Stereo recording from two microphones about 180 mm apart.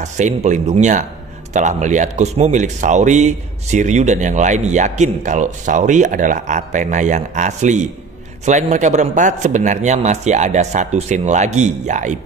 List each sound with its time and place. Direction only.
0.0 s speech: 40° right (ahead or behind)